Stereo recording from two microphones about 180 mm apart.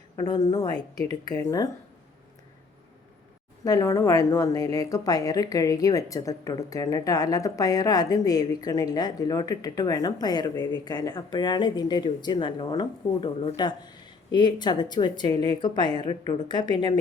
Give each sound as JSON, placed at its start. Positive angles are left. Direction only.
{"t": 0.2, "sound": "a woman's voice", "side_deg": 20}
{"t": 3.6, "sound": "a woman's voice", "side_deg": 20}